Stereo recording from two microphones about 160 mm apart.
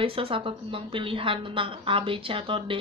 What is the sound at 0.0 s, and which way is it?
A woman's voice, 35° right (ahead or behind).